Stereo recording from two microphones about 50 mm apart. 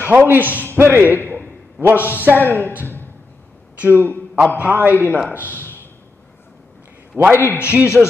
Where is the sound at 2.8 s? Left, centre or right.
Left.